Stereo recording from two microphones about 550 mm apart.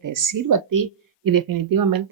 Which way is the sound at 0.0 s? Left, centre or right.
Right.